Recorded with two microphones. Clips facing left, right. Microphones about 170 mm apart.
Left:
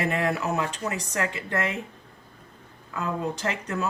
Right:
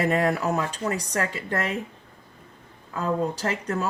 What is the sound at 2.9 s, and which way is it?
Speech, 35° right (ahead or behind).